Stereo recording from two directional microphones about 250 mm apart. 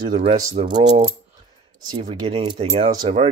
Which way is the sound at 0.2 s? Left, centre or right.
Right.